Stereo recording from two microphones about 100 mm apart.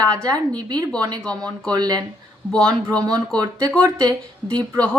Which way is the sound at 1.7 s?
40° right (ahead or behind).